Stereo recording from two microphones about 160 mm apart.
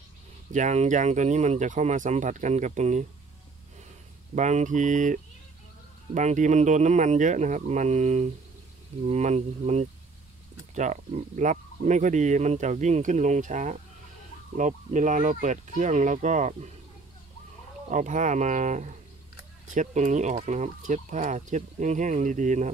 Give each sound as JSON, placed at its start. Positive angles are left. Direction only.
{"t": 0.5, "sound": "speech", "side_deg": -50}
{"t": 4.4, "sound": "speech", "side_deg": -50}
{"t": 17.8, "sound": "speech", "side_deg": -50}